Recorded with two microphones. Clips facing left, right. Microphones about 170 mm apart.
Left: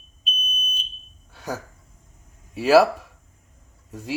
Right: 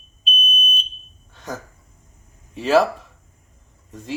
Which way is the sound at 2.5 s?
10° left (ahead or behind).